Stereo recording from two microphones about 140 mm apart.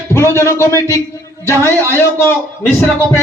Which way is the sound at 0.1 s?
20° left (ahead or behind).